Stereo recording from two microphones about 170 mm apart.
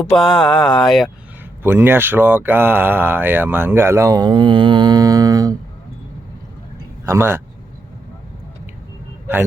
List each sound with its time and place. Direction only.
0.0 s speech: 5° left (ahead or behind)
1.6 s speech: 15° right (ahead or behind)
7.0 s speech: 15° right (ahead or behind)